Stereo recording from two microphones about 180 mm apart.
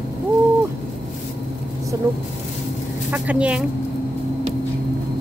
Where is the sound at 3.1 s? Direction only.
5° right (ahead or behind).